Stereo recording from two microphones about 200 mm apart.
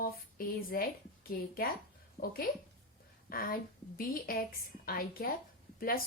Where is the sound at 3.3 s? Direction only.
45° left (ahead or behind).